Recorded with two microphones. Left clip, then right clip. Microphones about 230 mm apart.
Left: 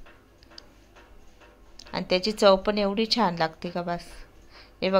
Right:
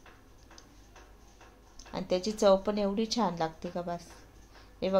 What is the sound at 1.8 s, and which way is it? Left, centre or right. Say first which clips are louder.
Speech: left 6 dB; centre.